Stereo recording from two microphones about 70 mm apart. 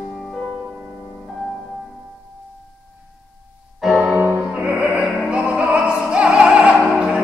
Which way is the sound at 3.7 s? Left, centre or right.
Centre.